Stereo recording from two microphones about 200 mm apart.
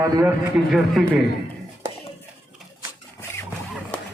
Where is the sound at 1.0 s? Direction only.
Centre (ahead or behind).